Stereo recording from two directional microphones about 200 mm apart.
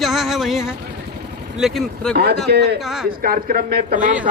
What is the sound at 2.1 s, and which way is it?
Speech, 50° right (ahead or behind).